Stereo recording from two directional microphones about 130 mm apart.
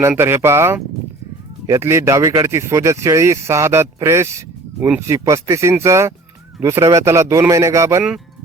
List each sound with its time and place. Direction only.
0.2 s speech: 20° right (ahead or behind)